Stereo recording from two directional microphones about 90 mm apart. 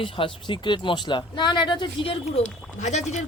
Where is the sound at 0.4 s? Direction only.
60° left (ahead or behind); by 2.4 s 75° left (ahead or behind).